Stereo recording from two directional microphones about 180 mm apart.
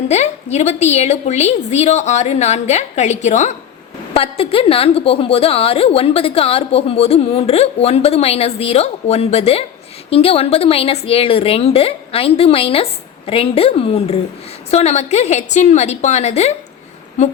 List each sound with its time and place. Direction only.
0.1 s a woman's voice: 40° left (ahead or behind)